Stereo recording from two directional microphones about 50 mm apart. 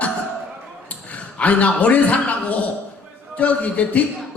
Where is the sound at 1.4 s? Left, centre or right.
Left.